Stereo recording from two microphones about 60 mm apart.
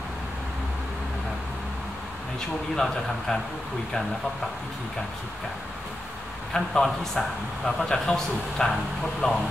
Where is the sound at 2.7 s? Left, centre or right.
Centre.